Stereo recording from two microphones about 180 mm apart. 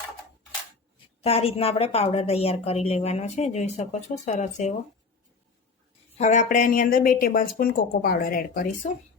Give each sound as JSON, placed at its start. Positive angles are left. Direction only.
{"t": 1.2, "sound": "a woman's voice", "side_deg": 35}
{"t": 6.1, "sound": "speech", "side_deg": 40}